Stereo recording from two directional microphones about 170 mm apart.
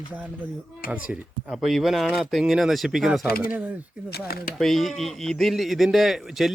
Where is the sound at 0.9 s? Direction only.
5° right (ahead or behind).